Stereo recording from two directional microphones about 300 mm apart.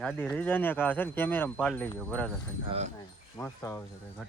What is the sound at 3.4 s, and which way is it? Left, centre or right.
Speech, centre.